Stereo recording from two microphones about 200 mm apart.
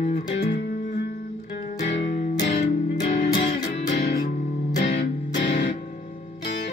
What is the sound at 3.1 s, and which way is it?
Music, 45° left (ahead or behind).